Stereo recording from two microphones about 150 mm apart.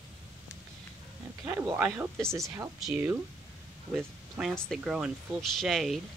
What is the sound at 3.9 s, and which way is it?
Speech, centre (ahead or behind).